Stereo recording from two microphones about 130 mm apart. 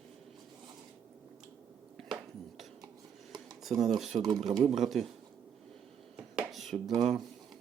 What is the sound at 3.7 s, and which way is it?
Speech, 50° right (ahead or behind).